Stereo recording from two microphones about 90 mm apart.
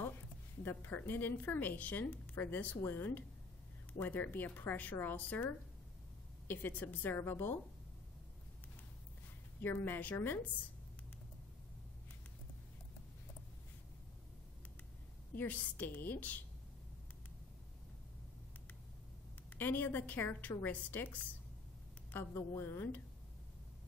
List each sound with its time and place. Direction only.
0.7 s speech: 25° left (ahead or behind)
9.6 s speech: 20° left (ahead or behind)
15.3 s speech: 20° left (ahead or behind)
19.5 s speech: 20° left (ahead or behind)